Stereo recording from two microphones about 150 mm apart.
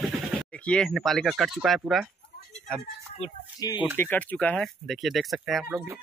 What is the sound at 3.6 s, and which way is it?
Speech, 25° left (ahead or behind).